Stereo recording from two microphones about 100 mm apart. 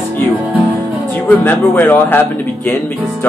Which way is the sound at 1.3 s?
15° left (ahead or behind).